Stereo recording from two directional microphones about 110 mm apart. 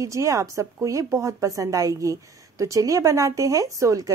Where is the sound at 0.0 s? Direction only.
30° right (ahead or behind).